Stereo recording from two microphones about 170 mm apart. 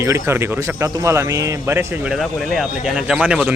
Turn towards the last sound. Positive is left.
turn(degrees=-10)  # may be behind; listen again after turning